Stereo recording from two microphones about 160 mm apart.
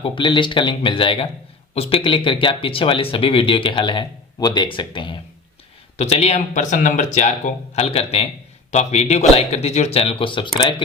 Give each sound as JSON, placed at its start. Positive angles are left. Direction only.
{"t": 0.0, "sound": "speech", "side_deg": 30}
{"t": 6.0, "sound": "speech", "side_deg": 40}